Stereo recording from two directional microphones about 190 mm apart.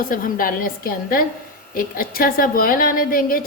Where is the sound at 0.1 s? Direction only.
45° left (ahead or behind).